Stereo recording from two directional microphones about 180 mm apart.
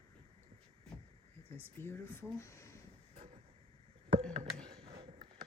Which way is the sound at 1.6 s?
10° left (ahead or behind).